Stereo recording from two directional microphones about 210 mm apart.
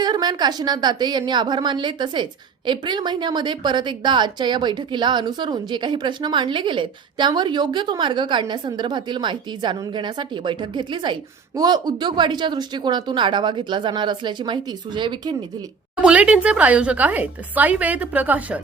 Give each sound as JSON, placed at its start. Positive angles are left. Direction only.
{"t": 0.0, "sound": "a woman's voice", "side_deg": -20}
{"t": 16.0, "sound": "speech", "side_deg": -5}